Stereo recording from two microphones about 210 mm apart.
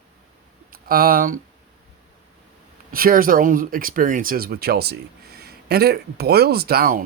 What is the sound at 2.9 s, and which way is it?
Speech, 45° right (ahead or behind).